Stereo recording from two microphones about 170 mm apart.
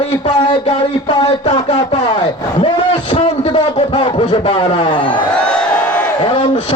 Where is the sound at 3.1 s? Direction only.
30° left (ahead or behind).